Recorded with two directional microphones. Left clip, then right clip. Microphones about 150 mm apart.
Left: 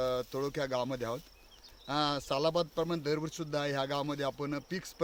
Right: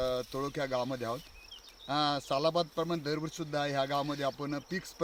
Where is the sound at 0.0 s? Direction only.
45° left (ahead or behind).